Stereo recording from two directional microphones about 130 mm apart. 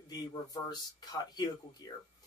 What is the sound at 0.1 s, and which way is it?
Speech, 30° left (ahead or behind).